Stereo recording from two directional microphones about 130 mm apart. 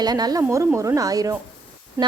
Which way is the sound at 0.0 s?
30° right (ahead or behind).